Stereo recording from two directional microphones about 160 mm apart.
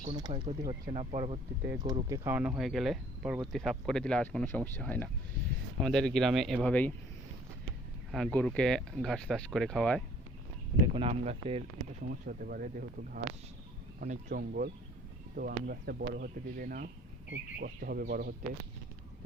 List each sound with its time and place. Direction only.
0.1 s speech: 30° right (ahead or behind)
1.8 s speech: 25° right (ahead or behind)
2.3 s speech: 5° right (ahead or behind); by 6.9 s 10° left (ahead or behind)
8.1 s speech: 5° left (ahead or behind)
10.9 s speech: 40° right (ahead or behind)
12.0 s speech: 60° right (ahead or behind)
14.3 s speech: 80° right
15.4 s speech: 70° right (ahead or behind)